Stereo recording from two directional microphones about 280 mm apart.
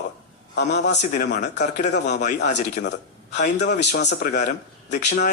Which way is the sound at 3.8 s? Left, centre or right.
Left.